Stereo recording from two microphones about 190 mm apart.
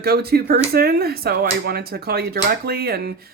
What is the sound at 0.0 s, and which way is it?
Speech, 55° right (ahead or behind).